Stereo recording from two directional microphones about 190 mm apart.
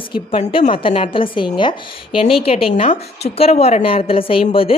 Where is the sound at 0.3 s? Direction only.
30° left (ahead or behind).